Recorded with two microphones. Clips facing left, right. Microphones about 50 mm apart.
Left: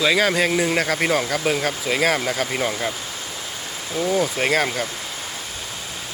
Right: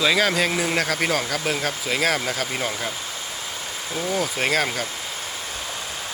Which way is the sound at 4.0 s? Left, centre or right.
Centre.